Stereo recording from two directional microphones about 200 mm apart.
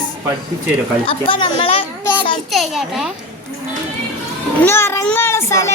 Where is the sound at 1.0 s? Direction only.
25° left (ahead or behind).